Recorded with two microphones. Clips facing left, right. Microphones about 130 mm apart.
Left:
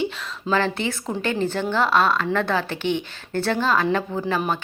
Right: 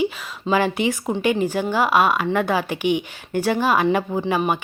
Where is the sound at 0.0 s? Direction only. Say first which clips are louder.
Right 3 dB; 10° right (ahead or behind).